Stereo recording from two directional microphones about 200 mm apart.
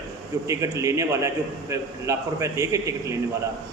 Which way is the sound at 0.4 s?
15° right (ahead or behind).